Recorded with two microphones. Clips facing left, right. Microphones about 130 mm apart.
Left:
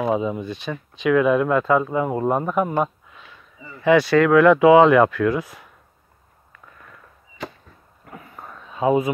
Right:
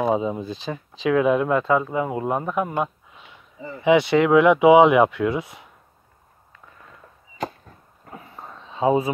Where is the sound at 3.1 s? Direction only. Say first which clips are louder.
Left 1 dB; 20° right (ahead or behind).